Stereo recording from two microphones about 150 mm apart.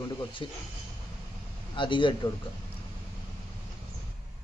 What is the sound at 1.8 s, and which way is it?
Speech, 35° left (ahead or behind).